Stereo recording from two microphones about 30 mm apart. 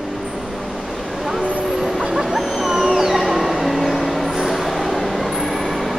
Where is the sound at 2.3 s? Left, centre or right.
Centre.